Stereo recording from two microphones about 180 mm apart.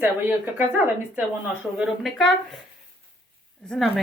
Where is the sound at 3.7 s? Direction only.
Centre (ahead or behind).